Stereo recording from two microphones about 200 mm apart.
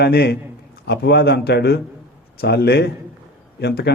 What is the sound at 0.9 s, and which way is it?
Speech, 55° left (ahead or behind).